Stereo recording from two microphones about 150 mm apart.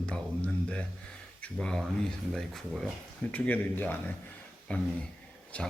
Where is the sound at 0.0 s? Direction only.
5° left (ahead or behind).